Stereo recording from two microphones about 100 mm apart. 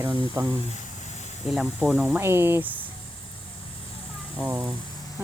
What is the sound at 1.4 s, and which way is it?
Speech, 5° right (ahead or behind).